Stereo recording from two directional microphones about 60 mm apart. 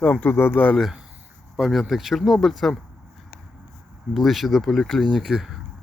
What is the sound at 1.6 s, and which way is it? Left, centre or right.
Speech, centre.